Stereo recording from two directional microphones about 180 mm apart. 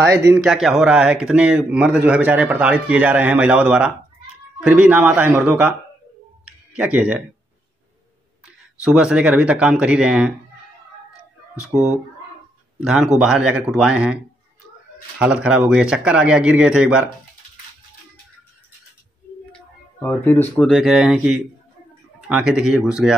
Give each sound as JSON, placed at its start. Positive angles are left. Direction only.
{"t": 0.0, "sound": "speech", "side_deg": -15}
{"t": 0.4, "sound": "speech", "side_deg": 0}
{"t": 6.8, "sound": "speech", "side_deg": -5}
{"t": 8.8, "sound": "speech", "side_deg": -5}
{"t": 11.7, "sound": "speech", "side_deg": -10}
{"t": 19.5, "sound": "speech", "side_deg": 10}